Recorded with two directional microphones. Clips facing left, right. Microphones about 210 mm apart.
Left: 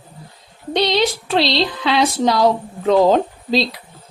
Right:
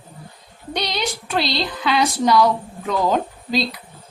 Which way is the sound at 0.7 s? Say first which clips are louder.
Left 8 dB; 25° left (ahead or behind).